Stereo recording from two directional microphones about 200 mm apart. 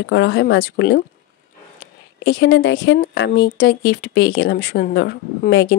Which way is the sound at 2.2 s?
60° left (ahead or behind).